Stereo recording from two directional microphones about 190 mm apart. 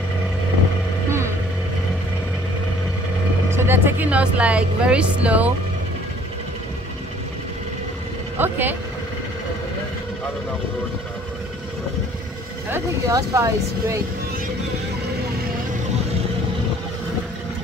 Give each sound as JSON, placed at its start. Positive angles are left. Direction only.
{"t": 3.4, "sound": "speech", "side_deg": -10}
{"t": 8.4, "sound": "vehicle", "side_deg": -10}
{"t": 12.7, "sound": "speech", "side_deg": -15}